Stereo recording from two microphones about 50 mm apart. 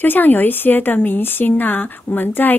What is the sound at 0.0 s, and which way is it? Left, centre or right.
A woman's voice, left.